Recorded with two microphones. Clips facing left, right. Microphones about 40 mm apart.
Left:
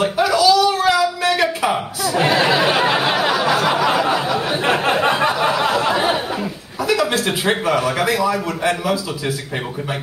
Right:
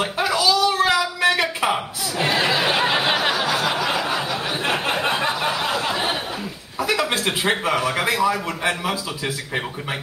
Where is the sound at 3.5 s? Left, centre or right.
Left.